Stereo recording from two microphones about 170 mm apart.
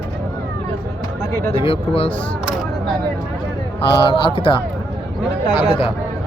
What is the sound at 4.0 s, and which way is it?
Speech, 30° left (ahead or behind).